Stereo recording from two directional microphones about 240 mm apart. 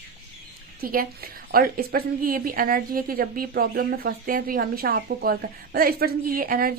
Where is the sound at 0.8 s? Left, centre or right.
Right.